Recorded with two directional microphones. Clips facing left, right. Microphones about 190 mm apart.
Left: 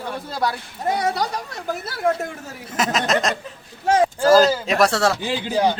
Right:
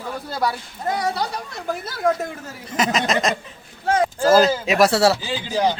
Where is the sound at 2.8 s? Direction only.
Centre (ahead or behind).